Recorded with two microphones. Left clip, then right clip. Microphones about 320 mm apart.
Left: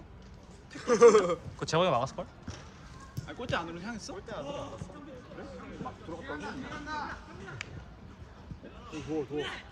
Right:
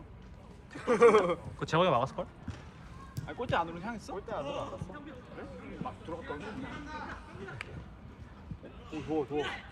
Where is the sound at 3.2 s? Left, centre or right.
Right.